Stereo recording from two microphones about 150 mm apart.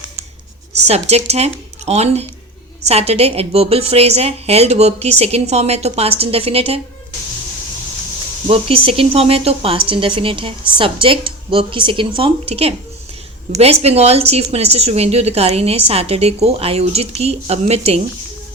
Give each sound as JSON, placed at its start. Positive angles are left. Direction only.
{"t": 0.9, "sound": "a woman's voice", "side_deg": -45}
{"t": 8.4, "sound": "a woman's voice", "side_deg": -40}